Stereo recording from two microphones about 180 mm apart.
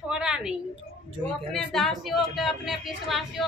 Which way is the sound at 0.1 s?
5° right (ahead or behind).